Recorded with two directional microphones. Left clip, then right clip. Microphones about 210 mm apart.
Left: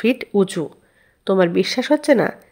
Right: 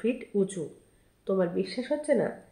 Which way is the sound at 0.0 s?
45° left (ahead or behind).